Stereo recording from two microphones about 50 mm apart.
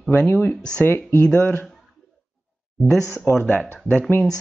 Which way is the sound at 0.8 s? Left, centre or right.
Left.